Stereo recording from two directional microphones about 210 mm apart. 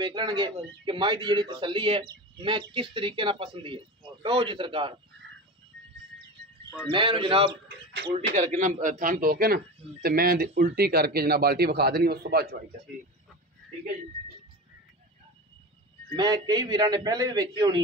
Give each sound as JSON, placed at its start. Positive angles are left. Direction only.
{"t": 0.0, "sound": "speech", "side_deg": -20}
{"t": 6.9, "sound": "speech", "side_deg": -25}
{"t": 7.6, "sound": "bird", "side_deg": -50}
{"t": 8.4, "sound": "a man's voice", "side_deg": -35}
{"t": 16.2, "sound": "speech", "side_deg": -20}